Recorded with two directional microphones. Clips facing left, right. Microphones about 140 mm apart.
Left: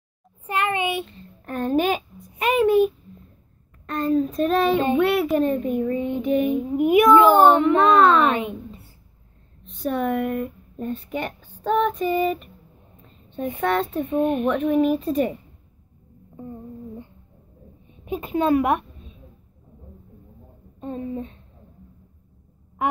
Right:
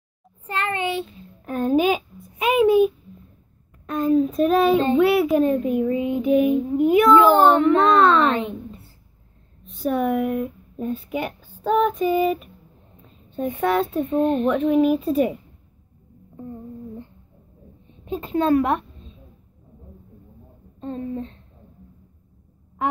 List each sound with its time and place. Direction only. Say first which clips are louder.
0.5 s a sound: left 1 dB; 15° left (ahead or behind)
1.0 s a sound: right 2 dB; 5° right (ahead or behind)
3.8 s a child's voice: right 2 dB; centre (ahead or behind)
6.8 s a child's voice: left 1 dB; 15° left (ahead or behind)
7.2 s a child's voice: even; centre (ahead or behind)
9.7 s speech: right 2 dB; centre (ahead or behind)
13.6 s a child's voice: right 2 dB; centre (ahead or behind)
17.8 s a sound: even; 15° left (ahead or behind)
20.8 s a child's voice: right 1 dB; 15° left (ahead or behind)
22.8 s quack: left 1 dB; 15° left (ahead or behind)